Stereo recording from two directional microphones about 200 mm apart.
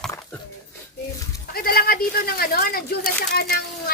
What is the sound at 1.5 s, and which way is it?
Speech, 50° left (ahead or behind).